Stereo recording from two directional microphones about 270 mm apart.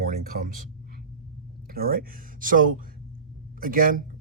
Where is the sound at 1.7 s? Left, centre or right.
Right.